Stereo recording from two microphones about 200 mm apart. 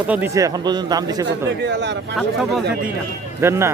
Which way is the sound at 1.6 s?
60° right (ahead or behind).